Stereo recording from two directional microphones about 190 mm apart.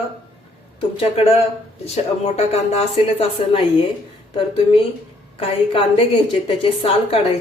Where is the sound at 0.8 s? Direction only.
30° left (ahead or behind).